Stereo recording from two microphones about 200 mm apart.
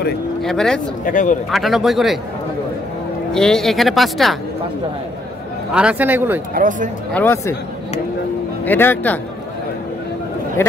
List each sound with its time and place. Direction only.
0.4 s speech: centre (ahead or behind)
1.0 s speech: 40° left (ahead or behind)
1.5 s speech: centre (ahead or behind)
3.3 s speech: 5° left (ahead or behind)
5.7 s a man's voice: 5° right (ahead or behind)
6.5 s speech: 40° right (ahead or behind)
7.2 s speech: 10° left (ahead or behind)
8.6 s speech: 10° left (ahead or behind)